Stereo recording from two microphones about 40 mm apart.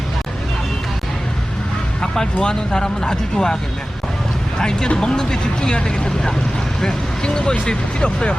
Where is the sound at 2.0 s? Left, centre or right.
Left.